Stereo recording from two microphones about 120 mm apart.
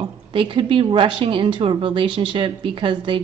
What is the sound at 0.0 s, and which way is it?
Speech, 45° right (ahead or behind).